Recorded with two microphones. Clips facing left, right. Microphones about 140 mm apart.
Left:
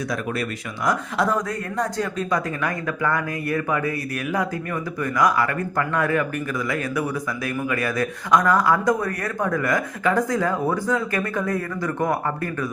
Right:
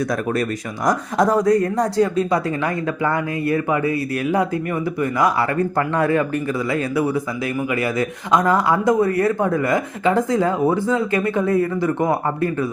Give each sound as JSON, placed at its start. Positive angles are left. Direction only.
{"t": 0.9, "sound": "a woman's voice", "side_deg": -40}